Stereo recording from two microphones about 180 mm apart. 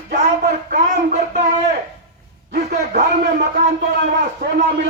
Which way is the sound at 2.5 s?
60° right (ahead or behind).